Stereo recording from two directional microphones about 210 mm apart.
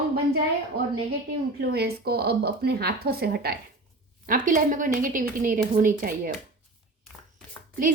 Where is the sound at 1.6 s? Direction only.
50° right (ahead or behind).